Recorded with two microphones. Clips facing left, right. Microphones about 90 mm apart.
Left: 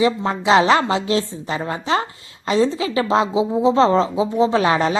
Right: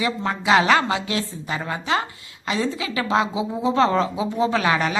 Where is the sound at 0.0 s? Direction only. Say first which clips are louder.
Left 5 dB; 25° left (ahead or behind).